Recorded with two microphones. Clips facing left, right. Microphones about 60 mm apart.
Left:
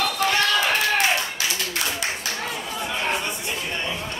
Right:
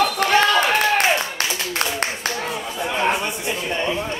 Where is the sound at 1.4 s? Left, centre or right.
Right.